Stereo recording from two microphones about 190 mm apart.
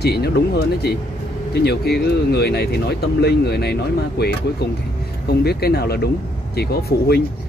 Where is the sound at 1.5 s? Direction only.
55° left (ahead or behind).